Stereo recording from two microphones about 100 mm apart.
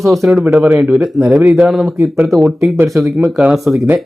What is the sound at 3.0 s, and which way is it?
Speech, 5° right (ahead or behind).